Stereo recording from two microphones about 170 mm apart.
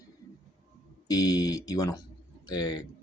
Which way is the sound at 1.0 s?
20° left (ahead or behind).